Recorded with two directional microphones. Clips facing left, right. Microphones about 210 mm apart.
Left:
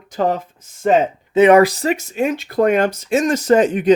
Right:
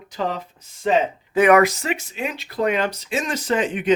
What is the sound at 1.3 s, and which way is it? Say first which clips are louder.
Speech: left 5 dB; 25° left (ahead or behind).